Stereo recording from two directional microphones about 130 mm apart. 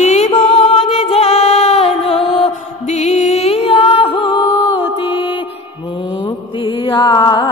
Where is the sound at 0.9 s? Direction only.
55° left (ahead or behind); by 5.2 s 35° left (ahead or behind).